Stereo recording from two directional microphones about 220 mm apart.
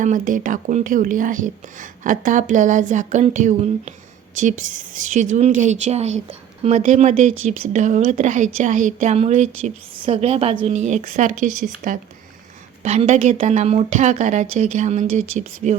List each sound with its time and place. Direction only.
0.0 s a woman's voice: 35° right (ahead or behind)